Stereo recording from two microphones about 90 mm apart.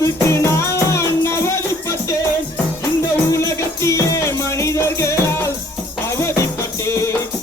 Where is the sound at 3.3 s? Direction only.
35° left (ahead or behind).